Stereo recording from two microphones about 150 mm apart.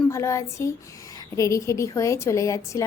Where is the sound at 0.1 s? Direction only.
20° left (ahead or behind).